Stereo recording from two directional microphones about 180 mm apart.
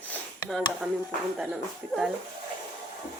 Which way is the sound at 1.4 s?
Centre (ahead or behind).